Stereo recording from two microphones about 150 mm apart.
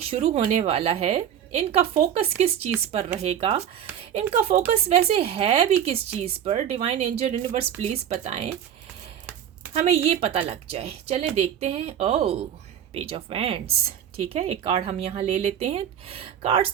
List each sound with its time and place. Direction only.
0.0 s a woman's voice: 45° right (ahead or behind)
9.9 s a woman's voice: 45° right (ahead or behind)